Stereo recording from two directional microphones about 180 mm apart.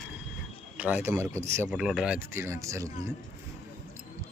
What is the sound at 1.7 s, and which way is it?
Speech, 5° right (ahead or behind).